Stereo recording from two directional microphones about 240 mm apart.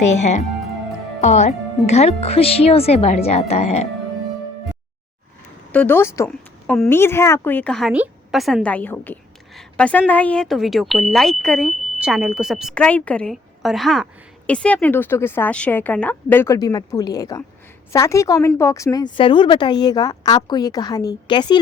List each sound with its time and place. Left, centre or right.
0.2 s speech: left
5.7 s a woman's voice: centre